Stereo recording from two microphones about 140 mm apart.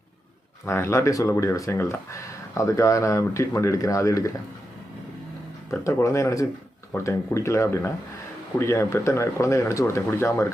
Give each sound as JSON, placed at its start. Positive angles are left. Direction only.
{"t": 0.6, "sound": "speech", "side_deg": 20}
{"t": 5.8, "sound": "speech", "side_deg": 20}